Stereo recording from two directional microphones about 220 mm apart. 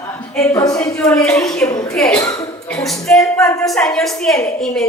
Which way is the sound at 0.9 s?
5° left (ahead or behind).